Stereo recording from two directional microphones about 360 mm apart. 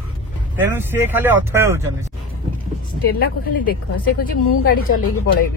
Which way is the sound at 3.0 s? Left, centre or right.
Left.